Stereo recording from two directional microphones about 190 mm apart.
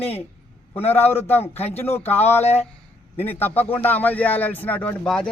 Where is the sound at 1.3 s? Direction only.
10° left (ahead or behind).